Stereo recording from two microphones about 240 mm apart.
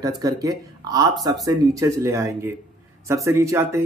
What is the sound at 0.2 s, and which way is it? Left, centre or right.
Speech, centre.